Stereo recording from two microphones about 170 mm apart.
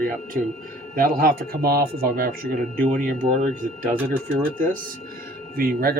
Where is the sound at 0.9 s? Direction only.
60° right (ahead or behind).